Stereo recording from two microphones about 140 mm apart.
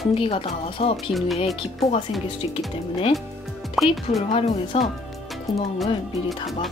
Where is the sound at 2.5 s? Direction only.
45° left (ahead or behind).